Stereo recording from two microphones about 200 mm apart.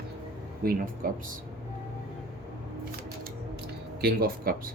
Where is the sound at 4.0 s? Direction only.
50° right (ahead or behind).